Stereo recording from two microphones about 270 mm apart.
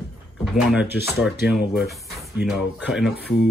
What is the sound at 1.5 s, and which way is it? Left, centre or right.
Speech, centre.